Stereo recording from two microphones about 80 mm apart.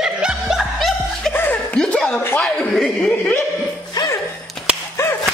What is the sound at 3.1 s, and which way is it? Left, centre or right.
Chuckle, left.